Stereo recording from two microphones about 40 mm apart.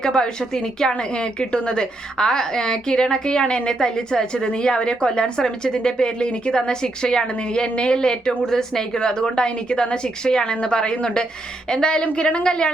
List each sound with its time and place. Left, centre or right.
0.0 s a woman's voice: centre